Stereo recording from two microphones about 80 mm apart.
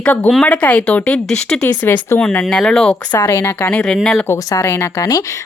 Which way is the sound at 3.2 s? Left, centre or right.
Left.